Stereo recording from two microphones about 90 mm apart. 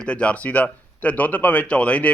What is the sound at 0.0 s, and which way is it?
A man's voice, 10° left (ahead or behind).